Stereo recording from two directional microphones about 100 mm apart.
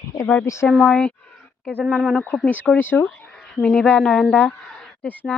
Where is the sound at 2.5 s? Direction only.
15° left (ahead or behind).